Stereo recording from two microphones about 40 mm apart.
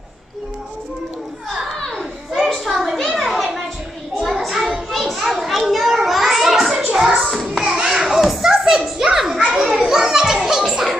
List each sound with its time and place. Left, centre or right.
2.0 s children playing: centre
2.6 s a sound: centre
4.9 s children playing: centre
6.8 s music: centre
7.2 s a sound: centre
7.6 s children playing: centre
7.9 s children playing: centre